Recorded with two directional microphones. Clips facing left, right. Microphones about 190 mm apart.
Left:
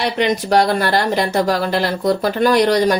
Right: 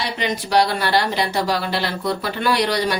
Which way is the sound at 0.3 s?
45° left (ahead or behind).